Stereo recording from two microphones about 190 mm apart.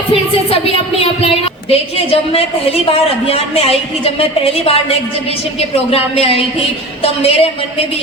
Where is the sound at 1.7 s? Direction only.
30° left (ahead or behind).